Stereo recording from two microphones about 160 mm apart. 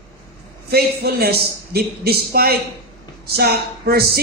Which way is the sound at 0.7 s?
75° right (ahead or behind).